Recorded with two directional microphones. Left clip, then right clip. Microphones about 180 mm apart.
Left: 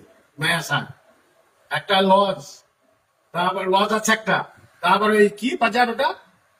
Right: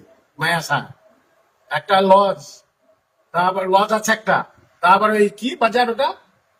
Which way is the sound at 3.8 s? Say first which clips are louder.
Right 2 dB; 20° right (ahead or behind).